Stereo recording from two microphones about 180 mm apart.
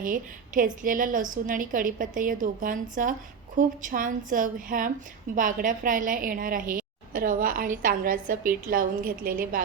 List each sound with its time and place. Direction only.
0.0 s a woman's voice: 50° right (ahead or behind)